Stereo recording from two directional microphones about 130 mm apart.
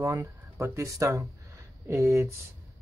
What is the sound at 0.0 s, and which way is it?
Speech, 25° right (ahead or behind).